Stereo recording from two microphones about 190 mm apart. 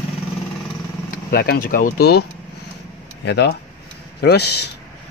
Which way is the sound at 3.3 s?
60° left (ahead or behind).